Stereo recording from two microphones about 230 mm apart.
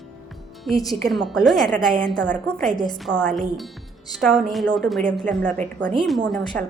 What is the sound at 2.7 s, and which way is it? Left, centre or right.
Speech, centre.